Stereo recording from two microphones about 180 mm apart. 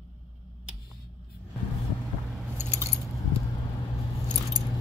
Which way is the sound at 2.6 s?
15° right (ahead or behind).